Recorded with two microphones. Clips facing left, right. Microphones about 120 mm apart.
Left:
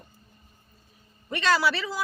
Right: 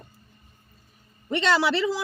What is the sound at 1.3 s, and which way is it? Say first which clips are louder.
Speech: right 2 dB; 25° right (ahead or behind).